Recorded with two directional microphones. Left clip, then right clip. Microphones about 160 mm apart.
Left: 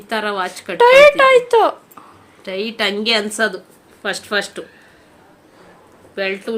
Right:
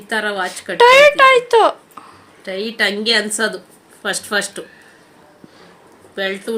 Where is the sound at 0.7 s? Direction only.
5° right (ahead or behind).